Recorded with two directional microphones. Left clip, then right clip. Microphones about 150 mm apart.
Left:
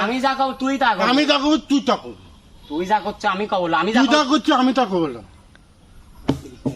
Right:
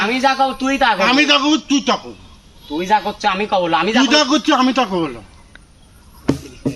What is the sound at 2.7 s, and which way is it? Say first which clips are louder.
Speech: right 4 dB; centre (ahead or behind).